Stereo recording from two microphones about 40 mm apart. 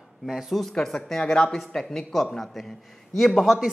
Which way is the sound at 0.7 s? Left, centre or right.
Centre.